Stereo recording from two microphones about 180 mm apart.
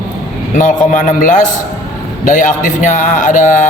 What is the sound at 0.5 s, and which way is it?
A man's voice, 45° left (ahead or behind).